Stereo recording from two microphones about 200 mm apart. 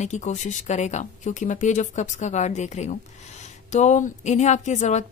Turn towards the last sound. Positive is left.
turn(degrees=35)  # may be behind; listen again after turning